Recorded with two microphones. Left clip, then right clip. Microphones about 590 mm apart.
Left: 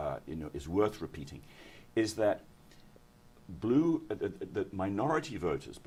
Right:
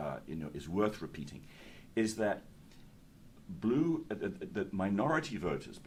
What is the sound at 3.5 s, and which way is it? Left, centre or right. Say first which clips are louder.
Speech: left 3 dB; left.